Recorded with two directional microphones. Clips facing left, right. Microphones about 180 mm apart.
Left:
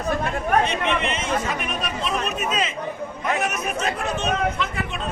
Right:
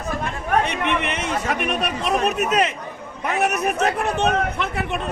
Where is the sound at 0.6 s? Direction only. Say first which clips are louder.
Even; 65° right (ahead or behind).